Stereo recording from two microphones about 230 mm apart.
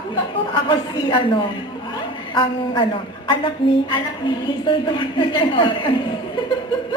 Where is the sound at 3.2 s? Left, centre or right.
Left.